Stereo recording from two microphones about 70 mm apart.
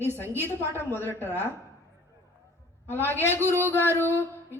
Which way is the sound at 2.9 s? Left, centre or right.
Left.